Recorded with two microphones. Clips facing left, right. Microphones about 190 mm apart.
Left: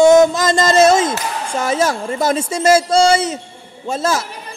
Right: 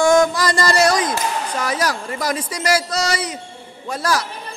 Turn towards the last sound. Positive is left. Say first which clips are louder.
# left 3 dB
turn(degrees=25)  # may be behind; listen again after turning